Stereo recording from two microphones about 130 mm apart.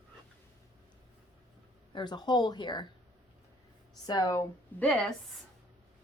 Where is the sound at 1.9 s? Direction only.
35° left (ahead or behind).